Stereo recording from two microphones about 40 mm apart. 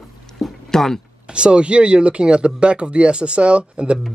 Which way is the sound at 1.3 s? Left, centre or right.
Right.